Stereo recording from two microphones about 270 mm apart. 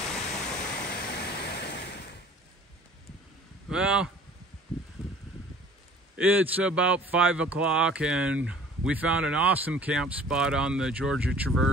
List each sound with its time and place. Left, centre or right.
0.1 s waterfall: centre
0.8 s a sound: left
3.7 s a man's voice: centre
6.1 s a man's voice: centre